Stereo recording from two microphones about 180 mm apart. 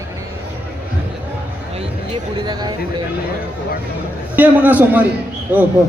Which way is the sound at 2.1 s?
25° right (ahead or behind).